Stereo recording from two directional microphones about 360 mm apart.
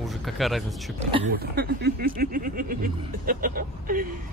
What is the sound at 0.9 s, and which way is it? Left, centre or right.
Speech, right.